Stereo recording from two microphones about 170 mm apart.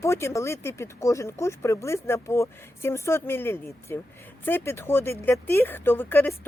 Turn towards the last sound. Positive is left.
turn(degrees=10)  # may be behind; listen again after turning